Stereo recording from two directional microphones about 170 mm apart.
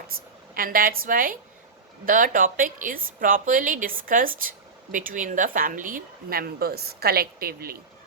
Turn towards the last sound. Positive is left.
turn(degrees=-60)  # may be behind; listen again after turning